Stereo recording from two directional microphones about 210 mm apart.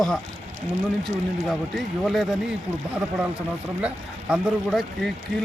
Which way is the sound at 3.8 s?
5° right (ahead or behind).